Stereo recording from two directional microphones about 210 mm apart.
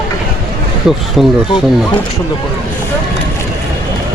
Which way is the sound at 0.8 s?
Centre (ahead or behind).